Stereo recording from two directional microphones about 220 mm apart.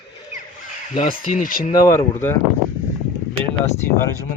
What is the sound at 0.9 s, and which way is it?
Speech, 25° left (ahead or behind).